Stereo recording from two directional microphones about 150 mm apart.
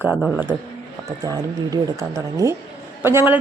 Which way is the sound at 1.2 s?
20° right (ahead or behind).